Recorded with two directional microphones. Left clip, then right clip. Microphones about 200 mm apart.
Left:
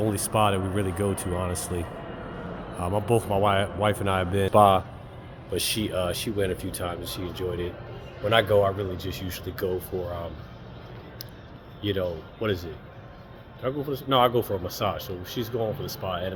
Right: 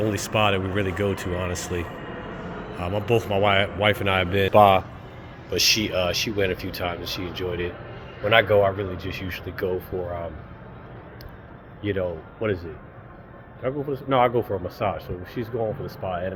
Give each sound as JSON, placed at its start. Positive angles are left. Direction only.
{"t": 0.0, "sound": "speech", "side_deg": 15}
{"t": 11.8, "sound": "speech", "side_deg": 25}